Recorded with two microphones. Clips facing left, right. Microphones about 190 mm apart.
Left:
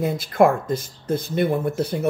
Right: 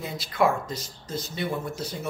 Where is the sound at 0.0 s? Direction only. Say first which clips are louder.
Left 7 dB; 50° left (ahead or behind).